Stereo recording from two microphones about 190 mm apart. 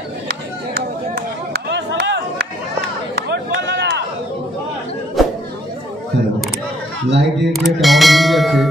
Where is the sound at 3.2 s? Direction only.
65° right (ahead or behind).